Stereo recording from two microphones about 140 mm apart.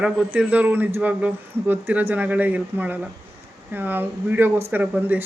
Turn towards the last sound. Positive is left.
turn(degrees=-15)  # may be behind; listen again after turning